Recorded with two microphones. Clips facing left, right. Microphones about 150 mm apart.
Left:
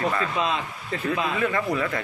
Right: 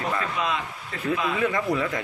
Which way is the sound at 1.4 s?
15° right (ahead or behind).